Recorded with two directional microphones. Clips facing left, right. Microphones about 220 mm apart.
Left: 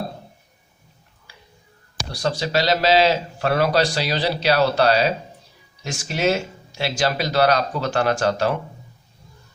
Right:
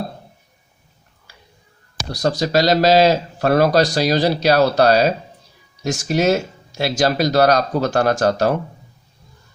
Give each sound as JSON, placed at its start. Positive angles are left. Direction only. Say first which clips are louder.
{"t": 2.1, "sound": "speech", "louder": "right 5 dB", "side_deg": -40}